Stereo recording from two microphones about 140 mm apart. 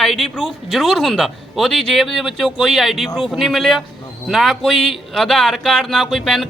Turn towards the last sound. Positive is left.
turn(degrees=0)  # may be behind; listen again after turning